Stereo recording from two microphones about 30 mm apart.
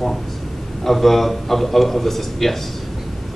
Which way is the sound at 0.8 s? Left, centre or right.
Centre.